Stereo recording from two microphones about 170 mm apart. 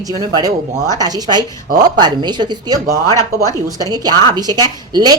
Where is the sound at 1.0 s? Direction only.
25° right (ahead or behind).